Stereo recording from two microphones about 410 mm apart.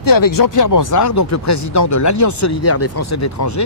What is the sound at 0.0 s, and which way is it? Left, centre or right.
Speech, left.